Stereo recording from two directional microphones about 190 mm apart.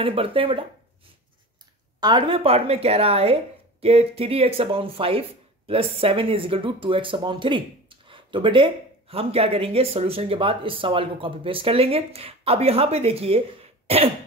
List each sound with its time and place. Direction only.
0.0 s speech: 30° right (ahead or behind)
2.0 s a woman's voice: 25° right (ahead or behind)
13.8 s throat clearing: 30° right (ahead or behind)